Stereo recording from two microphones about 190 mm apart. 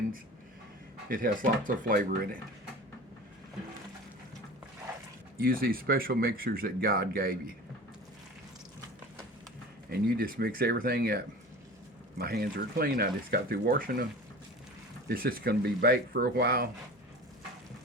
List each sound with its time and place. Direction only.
1.0 s speech: 45° right (ahead or behind)
5.4 s speech: 50° right (ahead or behind)
9.9 s speech: 50° right (ahead or behind)
15.1 s speech: 50° right (ahead or behind)